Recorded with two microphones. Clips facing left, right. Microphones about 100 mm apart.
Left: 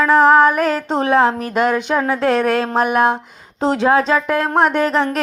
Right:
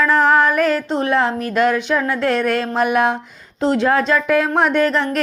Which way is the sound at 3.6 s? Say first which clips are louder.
Left 1 dB; 15° left (ahead or behind).